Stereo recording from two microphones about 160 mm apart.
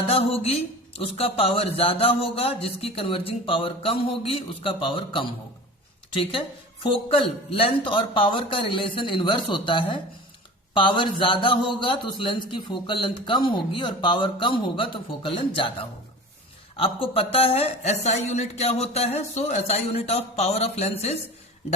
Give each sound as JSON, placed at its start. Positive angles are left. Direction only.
{"t": 0.1, "sound": "a woman's voice", "side_deg": 40}